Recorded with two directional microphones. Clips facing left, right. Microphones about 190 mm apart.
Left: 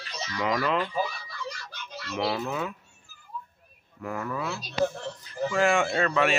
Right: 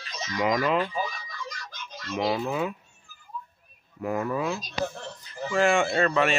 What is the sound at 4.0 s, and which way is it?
Speech, 15° right (ahead or behind).